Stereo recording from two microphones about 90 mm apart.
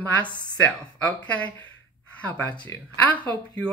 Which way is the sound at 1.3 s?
15° left (ahead or behind).